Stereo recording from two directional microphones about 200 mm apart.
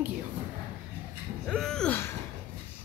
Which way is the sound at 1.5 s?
5° left (ahead or behind).